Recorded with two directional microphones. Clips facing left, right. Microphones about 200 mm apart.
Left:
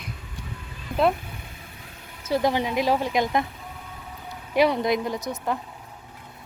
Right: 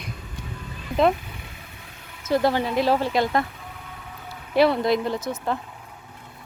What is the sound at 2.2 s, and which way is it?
Speech, 15° left (ahead or behind).